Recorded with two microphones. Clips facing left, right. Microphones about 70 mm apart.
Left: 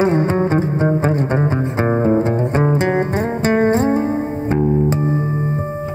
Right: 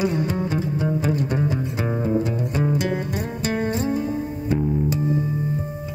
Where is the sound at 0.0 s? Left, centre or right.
Left.